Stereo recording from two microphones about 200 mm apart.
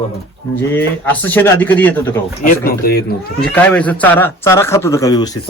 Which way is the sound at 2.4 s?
45° left (ahead or behind).